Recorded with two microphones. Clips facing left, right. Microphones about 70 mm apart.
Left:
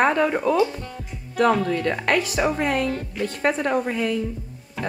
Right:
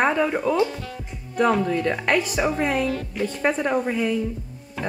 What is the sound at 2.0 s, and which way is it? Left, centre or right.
Speech, centre.